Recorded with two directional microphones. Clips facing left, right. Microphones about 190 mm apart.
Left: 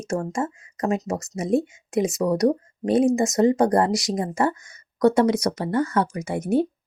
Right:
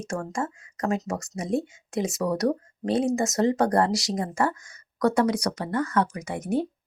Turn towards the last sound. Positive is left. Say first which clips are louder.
# left 5 dB
turn(degrees=25)  # may be behind; listen again after turning